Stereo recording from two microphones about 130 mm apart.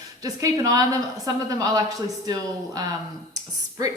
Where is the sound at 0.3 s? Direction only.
25° right (ahead or behind).